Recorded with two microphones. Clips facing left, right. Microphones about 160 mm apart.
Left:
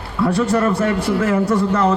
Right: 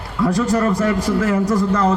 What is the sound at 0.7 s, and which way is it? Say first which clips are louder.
Speech: even; 35° right (ahead or behind).